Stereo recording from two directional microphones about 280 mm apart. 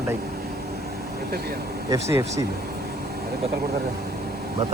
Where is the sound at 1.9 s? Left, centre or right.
Centre.